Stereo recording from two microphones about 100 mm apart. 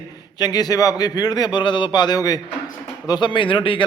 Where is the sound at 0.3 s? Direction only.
40° left (ahead or behind).